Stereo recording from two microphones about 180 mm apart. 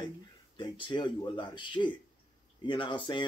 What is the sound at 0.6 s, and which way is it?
Speech, 25° left (ahead or behind).